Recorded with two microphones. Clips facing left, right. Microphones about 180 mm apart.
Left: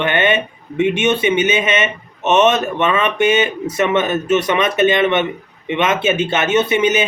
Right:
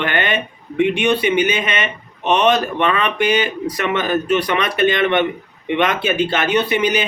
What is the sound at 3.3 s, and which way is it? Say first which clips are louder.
Speech: left 2 dB; 25° left (ahead or behind).